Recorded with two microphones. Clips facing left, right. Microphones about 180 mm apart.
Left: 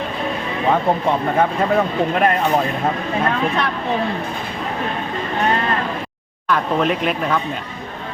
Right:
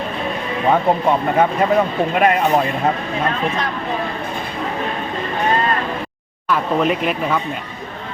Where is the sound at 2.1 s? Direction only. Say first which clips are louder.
Right 3 dB; 10° right (ahead or behind).